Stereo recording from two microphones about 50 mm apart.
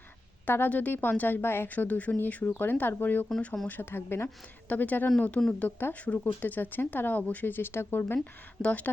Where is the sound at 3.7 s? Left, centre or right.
Left.